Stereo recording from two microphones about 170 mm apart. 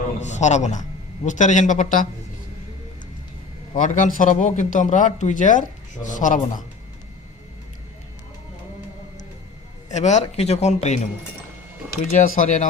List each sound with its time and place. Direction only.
0.2 s a man's voice: 45° left (ahead or behind)
3.8 s speech: 45° left (ahead or behind)
9.9 s speech: 45° left (ahead or behind)
12.1 s speech: 45° left (ahead or behind)